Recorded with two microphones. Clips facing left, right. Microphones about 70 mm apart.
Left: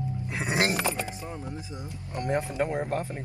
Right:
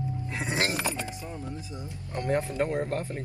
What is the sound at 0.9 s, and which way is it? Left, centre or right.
Speech, left.